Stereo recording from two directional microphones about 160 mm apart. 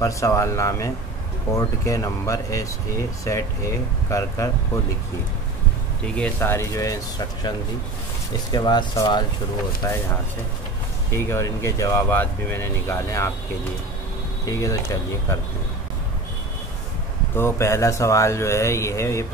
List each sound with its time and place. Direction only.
0.0 s speech: 20° left (ahead or behind)
6.0 s speech: 5° left (ahead or behind)
8.5 s speech: 25° left (ahead or behind)
11.1 s speech: 15° left (ahead or behind)
14.4 s speech: 20° left (ahead or behind)
17.4 s speech: 15° left (ahead or behind)